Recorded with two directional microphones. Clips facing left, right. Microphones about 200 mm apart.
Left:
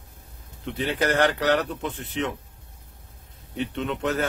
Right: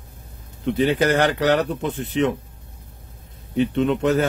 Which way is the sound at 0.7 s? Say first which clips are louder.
Right 5 dB; 15° right (ahead or behind).